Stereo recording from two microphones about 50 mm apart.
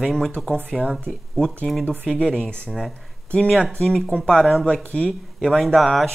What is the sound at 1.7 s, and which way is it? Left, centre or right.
Speech, centre.